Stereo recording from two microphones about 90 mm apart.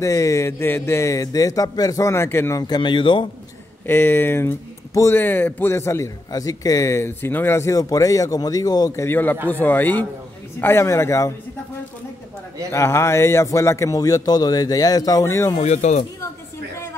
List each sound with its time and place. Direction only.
0.0 s a man's voice: 35° left (ahead or behind)
2.6 s speech: 60° left (ahead or behind)
3.8 s a man's voice: 25° left (ahead or behind)
9.5 s a man's voice: 20° left (ahead or behind)
12.7 s a man's voice: 30° left (ahead or behind)
15.2 s a man's voice: 30° left (ahead or behind)